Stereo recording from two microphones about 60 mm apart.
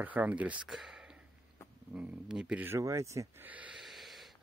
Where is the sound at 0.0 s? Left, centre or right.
Right.